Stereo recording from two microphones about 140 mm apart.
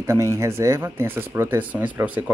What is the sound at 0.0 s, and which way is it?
Speech, 20° right (ahead or behind).